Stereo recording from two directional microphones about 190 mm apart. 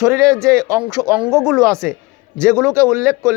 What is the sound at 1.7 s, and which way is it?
Speech, 5° left (ahead or behind).